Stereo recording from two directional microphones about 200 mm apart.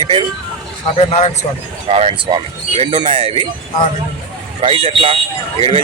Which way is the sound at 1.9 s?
30° right (ahead or behind).